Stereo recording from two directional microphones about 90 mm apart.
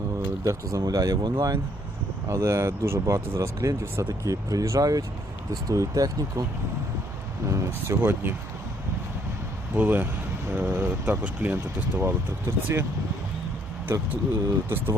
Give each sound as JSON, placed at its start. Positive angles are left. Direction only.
{"t": 0.4, "sound": "speech", "side_deg": -40}
{"t": 2.3, "sound": "speech", "side_deg": -35}
{"t": 7.4, "sound": "speech", "side_deg": -35}
{"t": 9.7, "sound": "speech", "side_deg": -20}
{"t": 14.7, "sound": "speech", "side_deg": -25}